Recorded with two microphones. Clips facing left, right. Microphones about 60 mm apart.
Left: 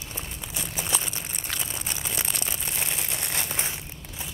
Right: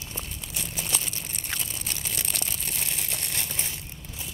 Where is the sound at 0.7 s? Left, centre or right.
Left.